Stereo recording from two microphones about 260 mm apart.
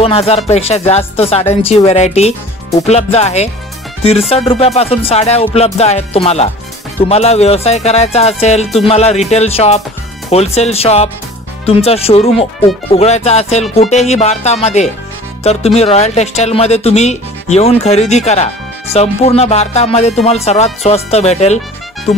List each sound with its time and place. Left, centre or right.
0.0 s speech: left
4.5 s speech: left